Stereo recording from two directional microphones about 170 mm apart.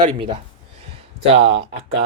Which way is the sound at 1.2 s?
35° right (ahead or behind).